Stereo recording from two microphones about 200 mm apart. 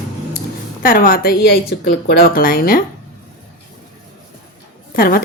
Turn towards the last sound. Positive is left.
turn(degrees=45)  # may be behind; listen again after turning